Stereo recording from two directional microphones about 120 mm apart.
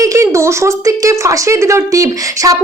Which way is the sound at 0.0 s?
25° right (ahead or behind).